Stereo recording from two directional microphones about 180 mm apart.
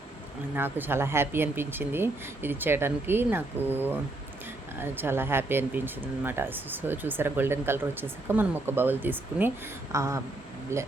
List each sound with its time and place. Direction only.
0.5 s speech: 10° right (ahead or behind)